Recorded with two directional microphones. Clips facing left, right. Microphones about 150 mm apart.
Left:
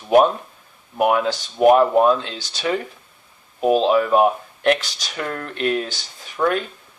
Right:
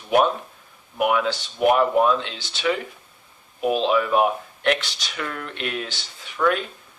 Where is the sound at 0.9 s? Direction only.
40° left (ahead or behind).